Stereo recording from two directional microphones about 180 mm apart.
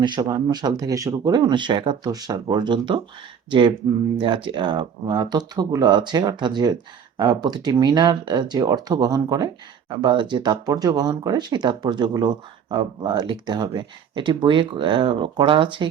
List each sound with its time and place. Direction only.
0.0 s speech: 25° right (ahead or behind)
4.2 s speech: 30° right (ahead or behind)